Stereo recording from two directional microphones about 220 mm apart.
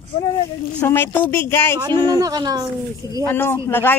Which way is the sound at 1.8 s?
20° right (ahead or behind).